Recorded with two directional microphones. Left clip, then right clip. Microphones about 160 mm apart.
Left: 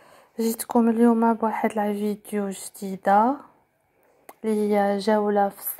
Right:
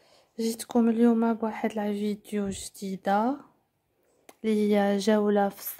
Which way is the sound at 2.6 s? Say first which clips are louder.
Left 3 dB; 15° left (ahead or behind).